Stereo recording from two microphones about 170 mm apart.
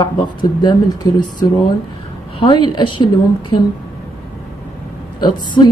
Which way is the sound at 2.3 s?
25° left (ahead or behind).